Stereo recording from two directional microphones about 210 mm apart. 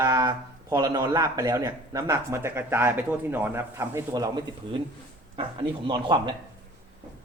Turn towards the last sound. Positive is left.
turn(degrees=-20)  # may be behind; listen again after turning